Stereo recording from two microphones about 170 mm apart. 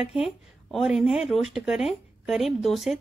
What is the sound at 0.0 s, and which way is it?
Speech, 5° right (ahead or behind).